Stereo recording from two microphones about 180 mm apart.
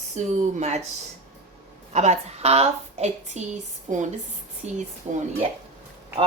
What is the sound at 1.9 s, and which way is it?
A woman's voice, 40° right (ahead or behind).